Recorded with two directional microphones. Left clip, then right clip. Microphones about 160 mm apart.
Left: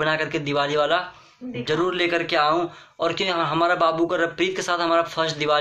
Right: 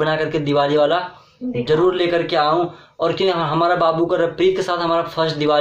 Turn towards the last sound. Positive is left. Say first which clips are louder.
# right 4 dB
turn(degrees=15)  # may be behind; listen again after turning